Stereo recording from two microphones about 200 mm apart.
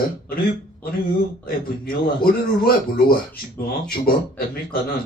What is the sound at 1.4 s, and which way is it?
A man's voice, 45° left (ahead or behind).